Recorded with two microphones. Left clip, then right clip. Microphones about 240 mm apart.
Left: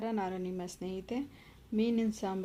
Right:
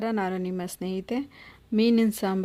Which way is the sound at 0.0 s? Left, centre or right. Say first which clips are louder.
Right 7 dB; right.